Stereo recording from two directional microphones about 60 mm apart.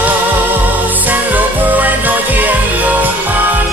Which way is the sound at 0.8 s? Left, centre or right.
Right.